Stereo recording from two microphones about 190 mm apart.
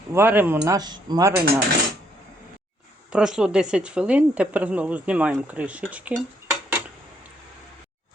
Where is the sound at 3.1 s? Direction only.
5° right (ahead or behind).